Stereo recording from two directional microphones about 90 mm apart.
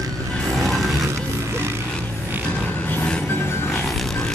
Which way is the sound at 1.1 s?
30° right (ahead or behind).